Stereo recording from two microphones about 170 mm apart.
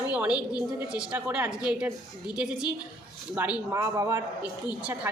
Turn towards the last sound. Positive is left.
turn(degrees=-20)  # may be behind; listen again after turning